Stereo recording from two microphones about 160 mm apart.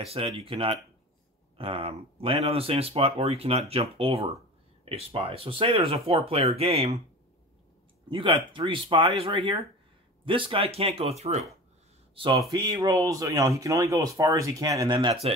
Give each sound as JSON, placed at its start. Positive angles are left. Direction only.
{"t": 0.0, "sound": "speech", "side_deg": -40}
{"t": 8.1, "sound": "speech", "side_deg": -30}
{"t": 12.4, "sound": "speech", "side_deg": -25}